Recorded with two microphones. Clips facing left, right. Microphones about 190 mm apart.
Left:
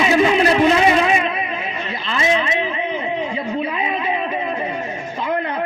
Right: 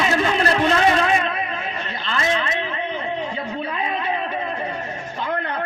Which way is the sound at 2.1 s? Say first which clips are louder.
Left 4 dB; 5° left (ahead or behind).